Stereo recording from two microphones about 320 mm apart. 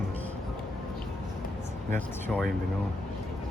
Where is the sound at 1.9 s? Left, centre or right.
Centre.